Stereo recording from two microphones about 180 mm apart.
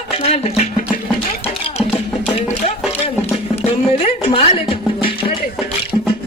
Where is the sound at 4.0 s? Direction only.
30° left (ahead or behind).